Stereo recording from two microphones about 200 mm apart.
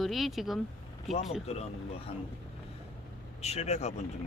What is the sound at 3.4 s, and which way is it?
Speech, 35° left (ahead or behind).